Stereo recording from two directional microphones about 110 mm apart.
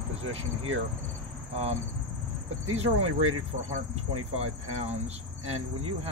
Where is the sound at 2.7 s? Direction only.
70° right (ahead or behind).